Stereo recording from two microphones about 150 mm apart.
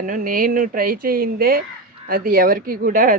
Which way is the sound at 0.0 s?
65° right (ahead or behind).